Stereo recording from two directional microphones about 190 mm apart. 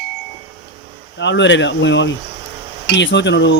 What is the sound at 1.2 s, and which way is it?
Speech, 70° left (ahead or behind).